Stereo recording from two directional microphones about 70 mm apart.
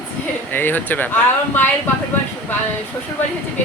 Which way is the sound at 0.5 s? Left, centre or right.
Left.